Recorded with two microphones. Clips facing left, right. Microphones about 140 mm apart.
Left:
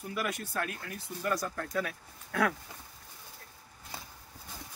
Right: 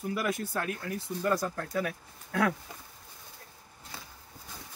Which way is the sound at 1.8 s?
20° right (ahead or behind).